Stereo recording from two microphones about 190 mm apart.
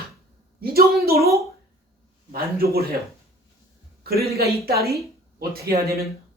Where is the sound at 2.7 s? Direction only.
55° right (ahead or behind).